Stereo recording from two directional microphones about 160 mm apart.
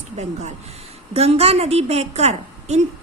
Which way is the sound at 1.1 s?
40° right (ahead or behind).